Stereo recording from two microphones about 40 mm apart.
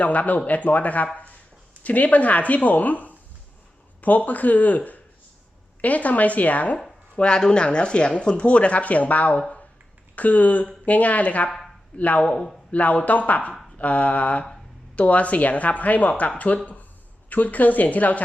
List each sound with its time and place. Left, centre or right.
0.0 s speech: left
1.1 s a sound: left
1.8 s speech: left
7.2 s speech: left
12.2 s speech: left
12.7 s speech: left